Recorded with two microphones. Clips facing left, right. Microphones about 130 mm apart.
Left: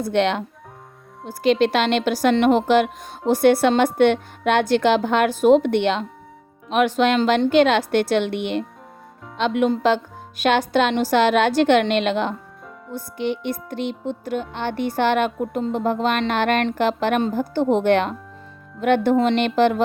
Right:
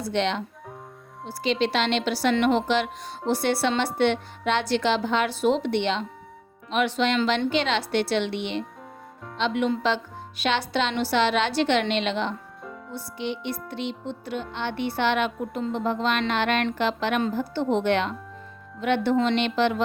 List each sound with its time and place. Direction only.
0.0 s a woman's voice: 55° left (ahead or behind)